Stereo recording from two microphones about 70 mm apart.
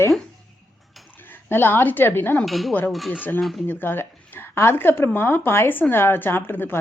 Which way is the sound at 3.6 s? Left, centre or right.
Left.